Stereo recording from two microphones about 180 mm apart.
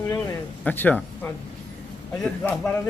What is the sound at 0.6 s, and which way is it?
Speech, 10° left (ahead or behind).